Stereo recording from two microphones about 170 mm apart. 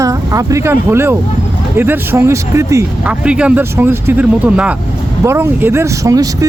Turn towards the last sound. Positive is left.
turn(degrees=-20)  # may be behind; listen again after turning